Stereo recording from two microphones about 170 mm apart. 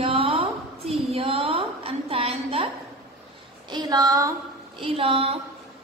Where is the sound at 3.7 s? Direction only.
25° right (ahead or behind).